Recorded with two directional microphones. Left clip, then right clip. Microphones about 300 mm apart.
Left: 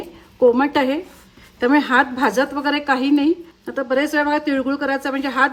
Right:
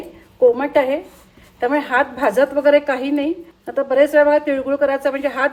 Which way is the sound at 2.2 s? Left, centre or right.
Centre.